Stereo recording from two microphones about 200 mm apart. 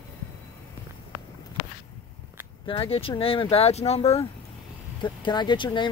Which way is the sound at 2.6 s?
25° left (ahead or behind).